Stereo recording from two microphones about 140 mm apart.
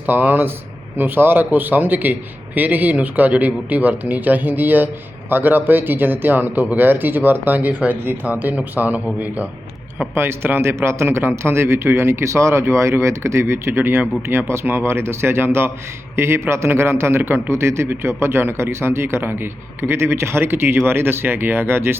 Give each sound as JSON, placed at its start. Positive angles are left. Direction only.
{"t": 0.0, "sound": "a man's voice", "side_deg": -15}